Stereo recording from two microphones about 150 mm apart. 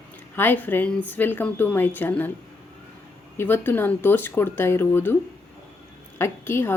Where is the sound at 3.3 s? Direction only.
15° left (ahead or behind).